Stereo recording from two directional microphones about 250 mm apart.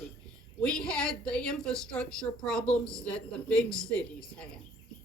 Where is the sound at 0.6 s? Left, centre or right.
Centre.